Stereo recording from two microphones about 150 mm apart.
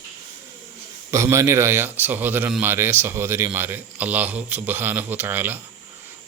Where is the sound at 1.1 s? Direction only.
20° right (ahead or behind).